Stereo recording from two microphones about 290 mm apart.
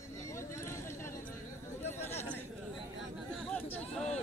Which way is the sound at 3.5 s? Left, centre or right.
Centre.